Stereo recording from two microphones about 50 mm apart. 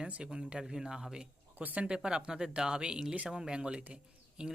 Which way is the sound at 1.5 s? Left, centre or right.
Right.